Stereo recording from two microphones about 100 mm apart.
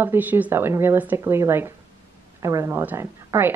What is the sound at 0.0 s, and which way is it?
A woman's voice, 20° right (ahead or behind).